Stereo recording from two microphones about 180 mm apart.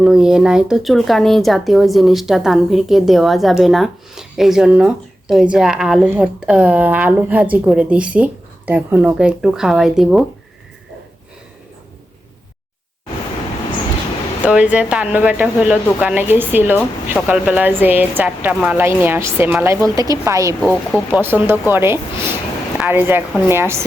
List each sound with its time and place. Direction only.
0.0 s speech: 5° right (ahead or behind)
14.4 s a woman's voice: 10° right (ahead or behind)